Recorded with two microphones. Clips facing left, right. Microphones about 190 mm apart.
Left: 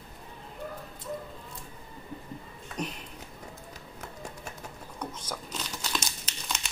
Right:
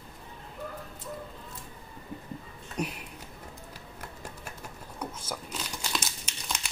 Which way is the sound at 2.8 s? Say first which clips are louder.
Right 2 dB; 10° right (ahead or behind).